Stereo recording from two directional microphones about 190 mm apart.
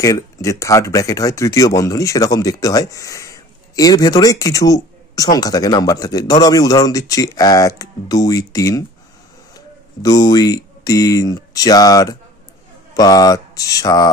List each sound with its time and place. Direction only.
0.0 s speech: 15° left (ahead or behind)
10.0 s speech: 20° left (ahead or behind)